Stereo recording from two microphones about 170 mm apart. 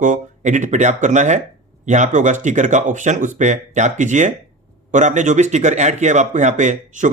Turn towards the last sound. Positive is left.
turn(degrees=-45)  # may be behind; listen again after turning